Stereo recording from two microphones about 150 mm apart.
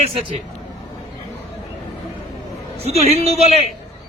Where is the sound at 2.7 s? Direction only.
40° right (ahead or behind).